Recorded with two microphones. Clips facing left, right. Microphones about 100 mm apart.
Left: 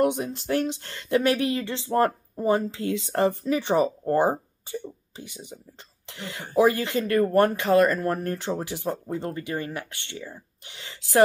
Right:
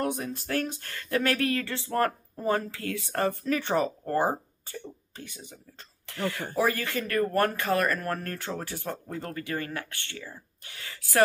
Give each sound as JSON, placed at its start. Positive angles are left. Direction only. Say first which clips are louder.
{"t": 0.0, "sound": "speech", "louder": "left 7 dB", "side_deg": 25}